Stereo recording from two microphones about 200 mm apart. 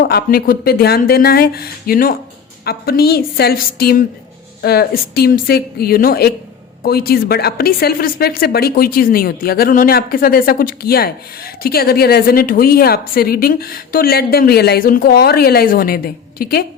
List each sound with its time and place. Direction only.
0.0 s a woman's voice: 50° left (ahead or behind)